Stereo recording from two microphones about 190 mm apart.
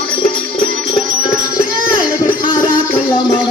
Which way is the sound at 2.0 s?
45° left (ahead or behind).